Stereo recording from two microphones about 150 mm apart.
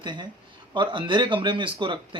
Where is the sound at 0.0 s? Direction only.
30° right (ahead or behind).